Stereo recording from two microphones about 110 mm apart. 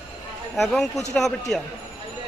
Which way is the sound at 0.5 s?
Centre (ahead or behind).